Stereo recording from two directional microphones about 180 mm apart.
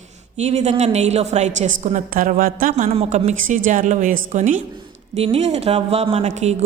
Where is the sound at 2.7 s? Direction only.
35° right (ahead or behind).